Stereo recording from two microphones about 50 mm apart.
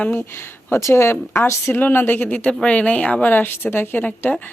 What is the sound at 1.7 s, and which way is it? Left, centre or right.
Speech, left.